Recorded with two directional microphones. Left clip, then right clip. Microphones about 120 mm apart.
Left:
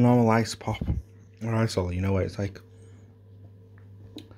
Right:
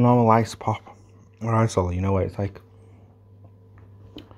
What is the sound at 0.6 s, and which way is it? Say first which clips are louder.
Speech: right 6 dB; 15° right (ahead or behind).